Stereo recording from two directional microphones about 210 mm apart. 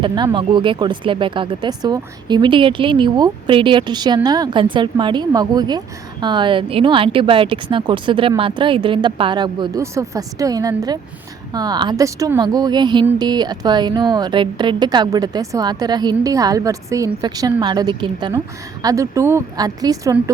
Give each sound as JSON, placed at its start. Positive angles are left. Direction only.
{"t": 0.0, "sound": "speech", "side_deg": -20}